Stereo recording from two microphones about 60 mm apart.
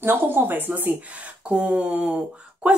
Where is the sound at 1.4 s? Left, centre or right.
Centre.